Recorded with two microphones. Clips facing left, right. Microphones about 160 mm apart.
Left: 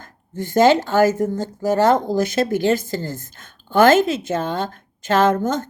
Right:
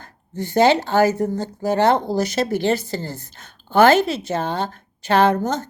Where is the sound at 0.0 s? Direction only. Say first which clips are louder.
Even; 45° left (ahead or behind).